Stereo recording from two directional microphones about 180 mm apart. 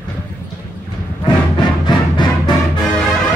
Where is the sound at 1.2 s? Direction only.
25° left (ahead or behind).